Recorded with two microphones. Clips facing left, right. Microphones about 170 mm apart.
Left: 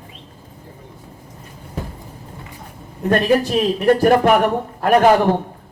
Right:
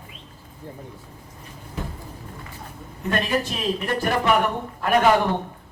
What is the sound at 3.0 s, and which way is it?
A man's voice, 45° left (ahead or behind).